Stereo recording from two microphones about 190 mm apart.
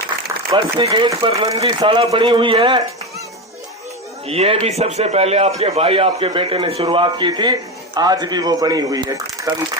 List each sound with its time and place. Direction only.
0.5 s a man's voice: 25° right (ahead or behind)
4.3 s a man's voice: 30° right (ahead or behind)